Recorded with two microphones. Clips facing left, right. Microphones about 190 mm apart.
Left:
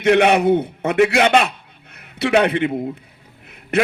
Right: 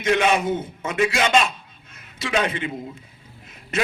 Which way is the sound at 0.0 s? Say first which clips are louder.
Left 6 dB; 65° left (ahead or behind).